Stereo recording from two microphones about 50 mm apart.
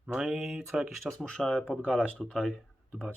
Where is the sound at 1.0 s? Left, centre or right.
Centre.